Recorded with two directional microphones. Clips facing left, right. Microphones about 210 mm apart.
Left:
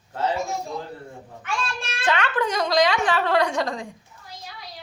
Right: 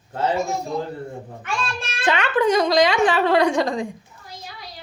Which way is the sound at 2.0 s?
20° right (ahead or behind).